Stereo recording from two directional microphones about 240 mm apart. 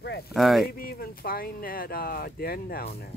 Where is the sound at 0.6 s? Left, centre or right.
Left.